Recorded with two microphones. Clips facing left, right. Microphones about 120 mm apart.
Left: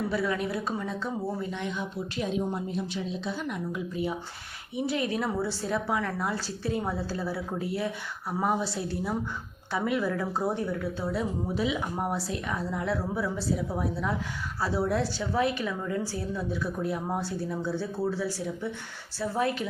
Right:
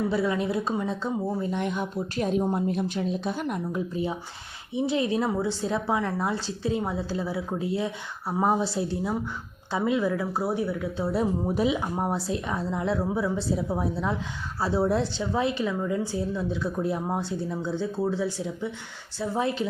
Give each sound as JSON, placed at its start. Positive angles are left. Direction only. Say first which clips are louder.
{"t": 0.1, "sound": "a woman's voice", "louder": "right 3 dB", "side_deg": -25}
{"t": 1.5, "sound": "a woman's voice", "louder": "right 5 dB", "side_deg": -55}
{"t": 9.7, "sound": "speech", "louder": "right 3 dB", "side_deg": -20}
{"t": 11.1, "sound": "a woman's voice", "louder": "right 7 dB", "side_deg": -40}